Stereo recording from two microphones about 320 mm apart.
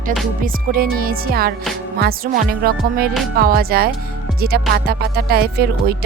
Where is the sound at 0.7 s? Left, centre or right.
Right.